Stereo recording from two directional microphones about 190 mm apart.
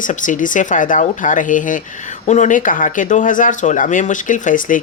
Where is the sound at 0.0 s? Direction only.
45° left (ahead or behind).